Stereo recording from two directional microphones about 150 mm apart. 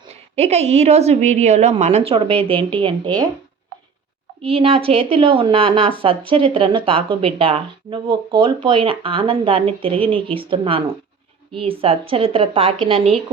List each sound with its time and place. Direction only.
0.1 s a woman's voice: 45° right (ahead or behind)
4.4 s a woman's voice: 40° right (ahead or behind)